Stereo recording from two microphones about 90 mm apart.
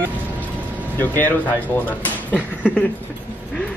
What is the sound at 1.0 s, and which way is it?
Speech, 20° left (ahead or behind).